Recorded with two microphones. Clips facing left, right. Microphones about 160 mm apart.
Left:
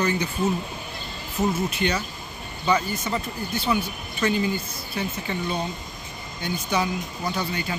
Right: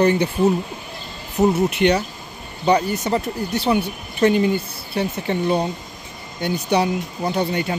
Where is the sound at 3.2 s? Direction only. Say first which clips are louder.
Right 6 dB; 70° right (ahead or behind).